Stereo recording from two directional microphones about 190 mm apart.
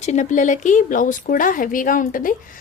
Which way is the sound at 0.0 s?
40° left (ahead or behind).